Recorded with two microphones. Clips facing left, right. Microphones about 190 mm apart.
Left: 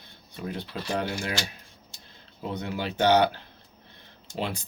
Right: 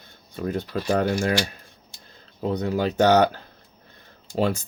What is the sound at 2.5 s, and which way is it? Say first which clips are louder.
Speech: right 8 dB; 40° right (ahead or behind).